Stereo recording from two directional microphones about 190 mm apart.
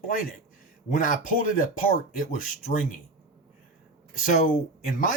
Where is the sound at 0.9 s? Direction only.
45° left (ahead or behind).